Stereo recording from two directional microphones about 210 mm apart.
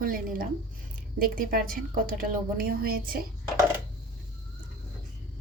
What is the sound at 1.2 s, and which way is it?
A woman's voice, 45° right (ahead or behind).